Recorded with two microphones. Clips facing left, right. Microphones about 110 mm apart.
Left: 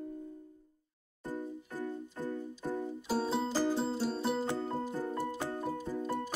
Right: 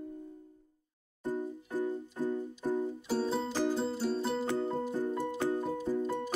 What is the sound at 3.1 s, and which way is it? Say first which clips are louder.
Music: left 1 dB; 5° left (ahead or behind).